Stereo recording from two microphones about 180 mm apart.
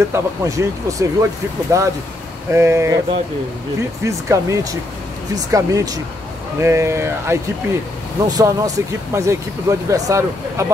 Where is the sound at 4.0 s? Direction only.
15° right (ahead or behind).